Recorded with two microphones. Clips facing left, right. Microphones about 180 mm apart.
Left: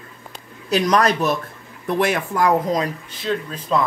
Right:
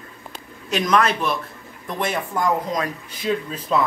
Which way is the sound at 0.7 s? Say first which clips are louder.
Left 2 dB; 35° left (ahead or behind).